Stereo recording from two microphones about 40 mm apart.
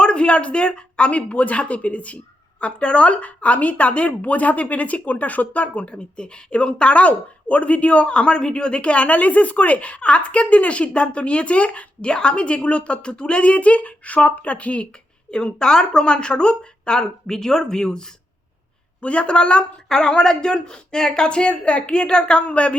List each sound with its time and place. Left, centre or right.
0.0 s a woman's voice: left
19.0 s speech: left